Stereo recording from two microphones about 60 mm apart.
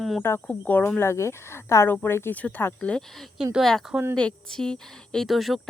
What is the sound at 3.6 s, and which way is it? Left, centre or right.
A woman's voice, centre.